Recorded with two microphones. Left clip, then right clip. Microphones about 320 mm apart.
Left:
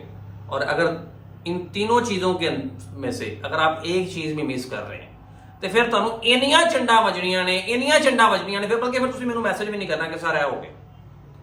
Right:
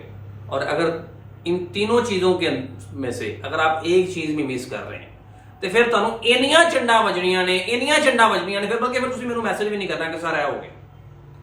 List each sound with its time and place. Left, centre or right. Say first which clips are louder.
0.5 s speech: even; centre